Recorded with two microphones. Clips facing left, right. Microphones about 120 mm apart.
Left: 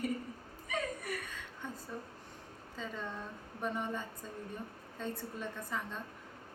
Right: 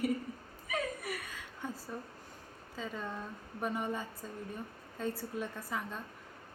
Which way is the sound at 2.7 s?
5° right (ahead or behind).